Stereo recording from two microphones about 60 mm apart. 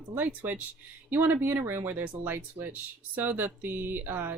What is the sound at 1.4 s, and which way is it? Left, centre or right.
Speech, right.